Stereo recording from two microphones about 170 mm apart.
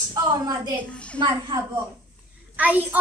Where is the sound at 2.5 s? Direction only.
10° right (ahead or behind).